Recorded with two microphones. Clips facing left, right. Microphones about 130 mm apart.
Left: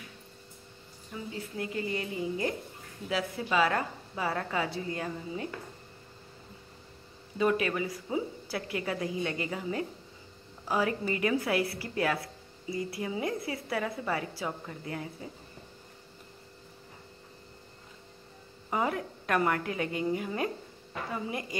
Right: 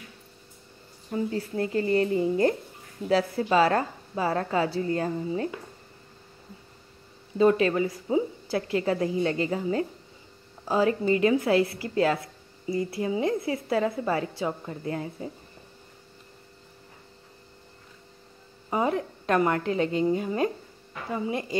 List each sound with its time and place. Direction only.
1.1 s a woman's voice: 40° right (ahead or behind)
7.3 s a woman's voice: 30° right (ahead or behind)
18.7 s a woman's voice: 25° right (ahead or behind)